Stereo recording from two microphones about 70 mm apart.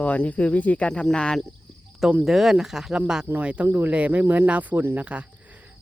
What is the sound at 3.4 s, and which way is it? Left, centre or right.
Speech, centre.